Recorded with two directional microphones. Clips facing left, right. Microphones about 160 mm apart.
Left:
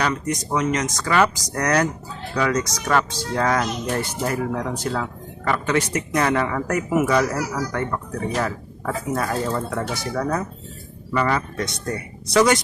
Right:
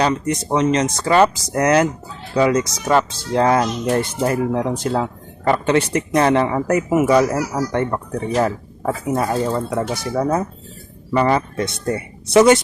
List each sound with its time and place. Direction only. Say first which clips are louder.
0.0 s speech: right 5 dB; 30° right (ahead or behind)